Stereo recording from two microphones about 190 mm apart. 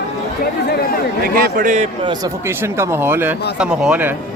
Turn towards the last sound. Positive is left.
turn(degrees=-5)  # may be behind; listen again after turning